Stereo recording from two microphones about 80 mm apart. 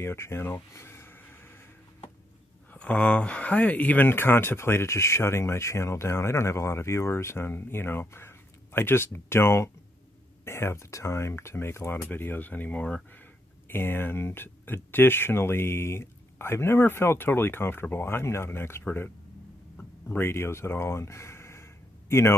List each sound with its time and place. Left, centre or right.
0.0 s speech: left
2.7 s speech: centre; by 21.6 s left